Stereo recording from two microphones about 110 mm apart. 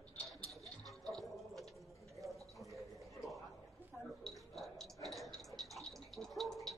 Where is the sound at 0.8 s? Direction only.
Centre (ahead or behind).